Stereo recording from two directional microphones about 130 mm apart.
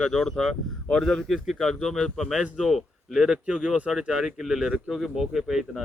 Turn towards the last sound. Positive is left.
turn(degrees=0)  # may be behind; listen again after turning